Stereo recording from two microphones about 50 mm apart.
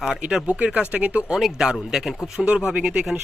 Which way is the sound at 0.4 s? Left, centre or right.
Right.